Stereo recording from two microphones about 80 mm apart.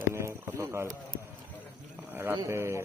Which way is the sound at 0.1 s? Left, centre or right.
Right.